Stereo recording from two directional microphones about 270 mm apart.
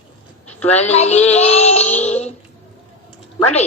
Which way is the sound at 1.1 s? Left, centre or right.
Left.